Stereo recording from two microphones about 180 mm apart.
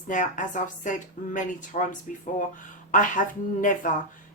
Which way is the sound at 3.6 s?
45° left (ahead or behind).